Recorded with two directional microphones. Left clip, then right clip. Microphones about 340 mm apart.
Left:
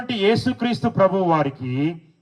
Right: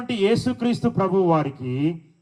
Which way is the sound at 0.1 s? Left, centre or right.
Left.